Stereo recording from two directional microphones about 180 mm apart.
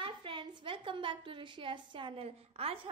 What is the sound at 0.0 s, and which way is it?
A woman's voice, 30° right (ahead or behind).